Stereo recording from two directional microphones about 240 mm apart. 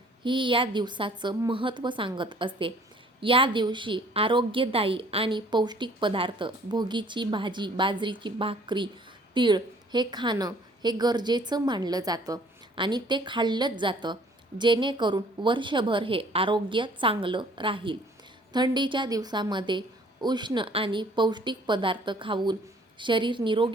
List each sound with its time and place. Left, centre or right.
0.3 s a woman's voice: right